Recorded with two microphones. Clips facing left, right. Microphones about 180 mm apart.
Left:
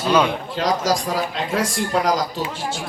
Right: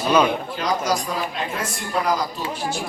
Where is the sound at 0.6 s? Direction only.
80° left.